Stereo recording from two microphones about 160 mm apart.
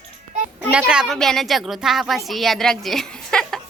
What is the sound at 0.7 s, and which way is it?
A woman's voice, 5° right (ahead or behind).